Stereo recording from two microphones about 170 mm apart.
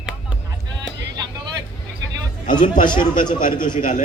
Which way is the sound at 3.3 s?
50° left (ahead or behind).